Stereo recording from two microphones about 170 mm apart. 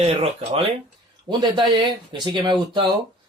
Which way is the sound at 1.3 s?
25° right (ahead or behind).